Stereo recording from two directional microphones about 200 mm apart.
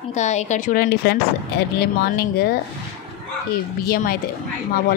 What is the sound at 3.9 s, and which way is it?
Speech, 50° left (ahead or behind).